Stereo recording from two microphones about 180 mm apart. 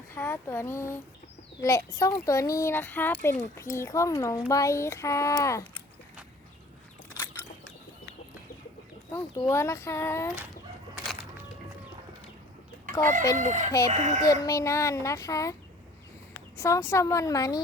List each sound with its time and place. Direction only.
0.2 s a child's voice: 15° left (ahead or behind)
9.1 s a child's voice: 15° left (ahead or behind)
13.3 s chicken: 45° right (ahead or behind)
13.7 s speech: 20° left (ahead or behind)
13.9 s speech: 40° right (ahead or behind)
14.4 s a child's voice: 15° left (ahead or behind)
16.6 s a child's voice: 15° left (ahead or behind)